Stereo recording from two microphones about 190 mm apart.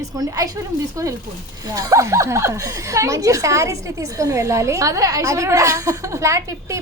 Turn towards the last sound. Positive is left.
turn(degrees=-15)  # may be behind; listen again after turning